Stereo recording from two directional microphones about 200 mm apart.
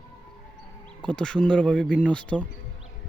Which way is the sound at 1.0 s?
5° left (ahead or behind).